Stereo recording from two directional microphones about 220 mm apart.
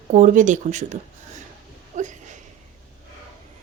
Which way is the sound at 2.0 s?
35° right (ahead or behind).